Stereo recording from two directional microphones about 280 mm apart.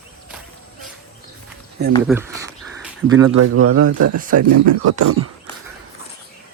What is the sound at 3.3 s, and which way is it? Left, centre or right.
Speech, right.